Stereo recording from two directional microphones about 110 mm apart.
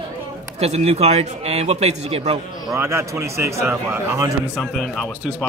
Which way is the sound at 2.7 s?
25° right (ahead or behind).